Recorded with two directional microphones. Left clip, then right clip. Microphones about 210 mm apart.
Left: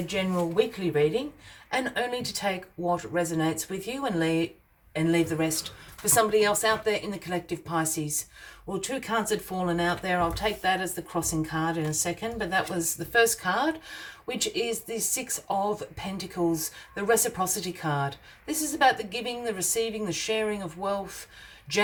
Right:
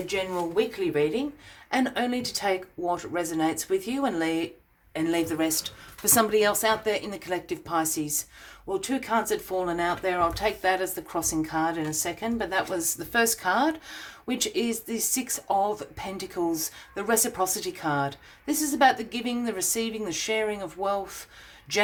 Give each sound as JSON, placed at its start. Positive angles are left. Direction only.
{"t": 0.5, "sound": "speech", "side_deg": -35}